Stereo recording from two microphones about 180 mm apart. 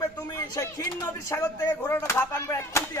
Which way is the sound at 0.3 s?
15° left (ahead or behind).